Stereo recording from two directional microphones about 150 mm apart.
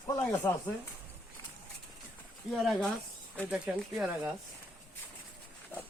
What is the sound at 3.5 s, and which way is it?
Speech, 5° right (ahead or behind).